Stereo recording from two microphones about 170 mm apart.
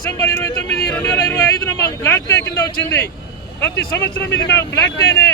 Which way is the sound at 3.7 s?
85° left.